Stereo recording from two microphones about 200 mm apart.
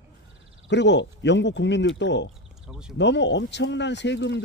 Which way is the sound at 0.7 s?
60° left (ahead or behind).